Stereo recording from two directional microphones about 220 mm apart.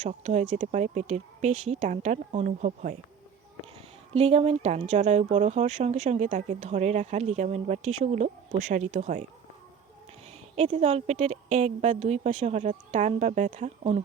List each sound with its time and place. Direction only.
0.0 s speech: 30° right (ahead or behind)
4.1 s speech: 30° right (ahead or behind)
10.5 s speech: 30° right (ahead or behind)